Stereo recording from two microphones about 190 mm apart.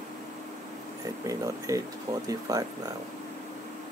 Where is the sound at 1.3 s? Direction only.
15° right (ahead or behind).